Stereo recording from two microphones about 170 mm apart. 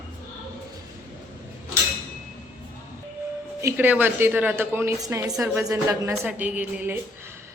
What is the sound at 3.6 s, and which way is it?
A woman's voice, 15° right (ahead or behind).